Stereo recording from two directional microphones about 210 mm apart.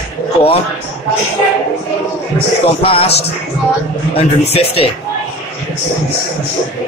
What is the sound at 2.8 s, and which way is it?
Speech, 25° left (ahead or behind).